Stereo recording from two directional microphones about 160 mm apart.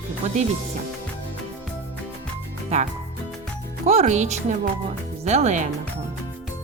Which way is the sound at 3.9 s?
45° right (ahead or behind).